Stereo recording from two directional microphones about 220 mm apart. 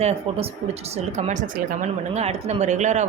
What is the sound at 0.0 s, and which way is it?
A woman's voice, 30° right (ahead or behind).